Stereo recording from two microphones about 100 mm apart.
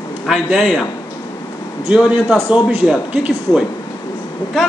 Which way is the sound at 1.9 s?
10° right (ahead or behind).